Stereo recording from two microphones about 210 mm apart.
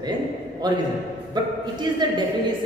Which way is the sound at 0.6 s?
20° right (ahead or behind).